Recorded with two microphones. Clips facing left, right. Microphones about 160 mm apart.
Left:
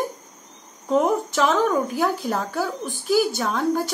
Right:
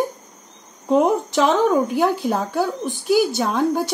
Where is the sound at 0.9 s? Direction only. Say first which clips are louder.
Right 3 dB; 20° right (ahead or behind).